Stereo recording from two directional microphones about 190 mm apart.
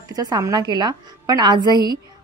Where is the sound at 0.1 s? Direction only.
20° right (ahead or behind).